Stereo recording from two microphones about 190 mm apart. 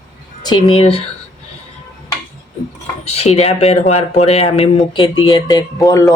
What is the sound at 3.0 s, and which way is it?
Speech, 35° left (ahead or behind).